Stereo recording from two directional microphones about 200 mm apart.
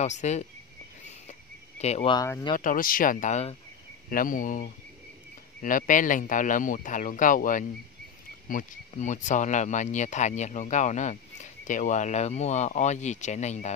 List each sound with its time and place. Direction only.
0.0 s speech: 35° left (ahead or behind)
1.8 s speech: 35° left (ahead or behind)
2.1 s speech: 15° left (ahead or behind)
2.5 s speech: 45° left (ahead or behind)